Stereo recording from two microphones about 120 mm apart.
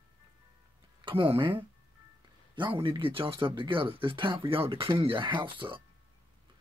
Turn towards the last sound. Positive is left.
turn(degrees=-45)  # may be behind; listen again after turning